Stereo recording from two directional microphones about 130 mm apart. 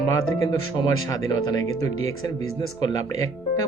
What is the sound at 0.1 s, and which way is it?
Speech, 25° left (ahead or behind).